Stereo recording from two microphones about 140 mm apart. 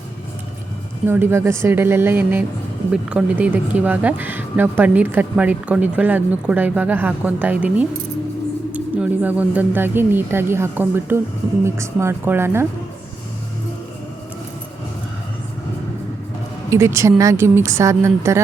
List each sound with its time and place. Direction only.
1.0 s a woman's voice: 15° right (ahead or behind)
16.6 s a woman's voice: 20° right (ahead or behind)